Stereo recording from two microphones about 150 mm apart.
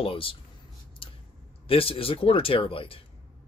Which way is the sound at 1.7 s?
40° left (ahead or behind).